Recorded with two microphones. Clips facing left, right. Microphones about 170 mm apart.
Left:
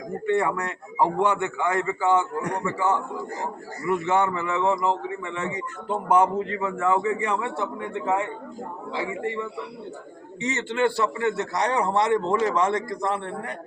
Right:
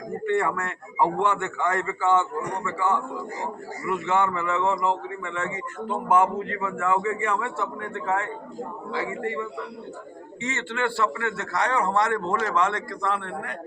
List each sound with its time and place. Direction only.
0.3 s a man's voice: 15° left (ahead or behind)
4.0 s a man's voice: 20° left (ahead or behind)
5.5 s speech: 35° left (ahead or behind)
6.1 s a man's voice: 20° left (ahead or behind)
10.4 s a man's voice: 20° left (ahead or behind)